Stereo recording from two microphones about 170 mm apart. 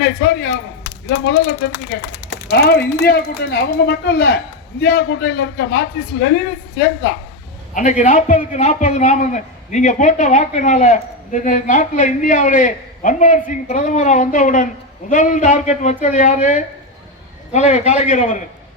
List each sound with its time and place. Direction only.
0.0 s a sound: 70° left (ahead or behind)
1.0 s speech: 80° left
7.7 s a man's voice: 45° left (ahead or behind)